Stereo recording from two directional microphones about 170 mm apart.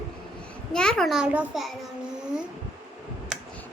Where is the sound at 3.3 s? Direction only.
5° right (ahead or behind).